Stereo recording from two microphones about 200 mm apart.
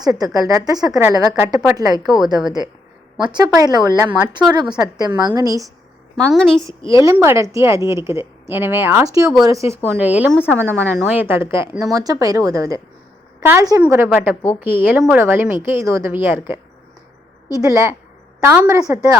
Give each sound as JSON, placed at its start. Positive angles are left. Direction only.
{"t": 0.0, "sound": "a woman's voice", "side_deg": -20}
{"t": 6.3, "sound": "a woman's voice", "side_deg": 0}
{"t": 7.0, "sound": "a woman's voice", "side_deg": -15}
{"t": 10.3, "sound": "speech", "side_deg": 5}
{"t": 11.1, "sound": "a woman's voice", "side_deg": -10}
{"t": 17.6, "sound": "a woman's voice", "side_deg": -15}